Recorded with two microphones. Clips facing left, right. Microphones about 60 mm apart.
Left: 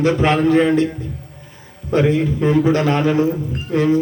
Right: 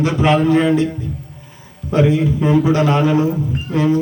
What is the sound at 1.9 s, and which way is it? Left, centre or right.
A man's voice, left.